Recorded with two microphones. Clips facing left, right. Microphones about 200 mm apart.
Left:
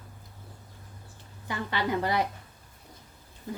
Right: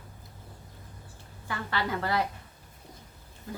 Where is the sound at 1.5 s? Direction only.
20° left (ahead or behind).